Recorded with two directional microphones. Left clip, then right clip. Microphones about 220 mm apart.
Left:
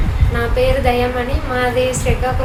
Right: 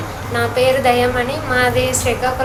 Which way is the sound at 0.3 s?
10° left (ahead or behind).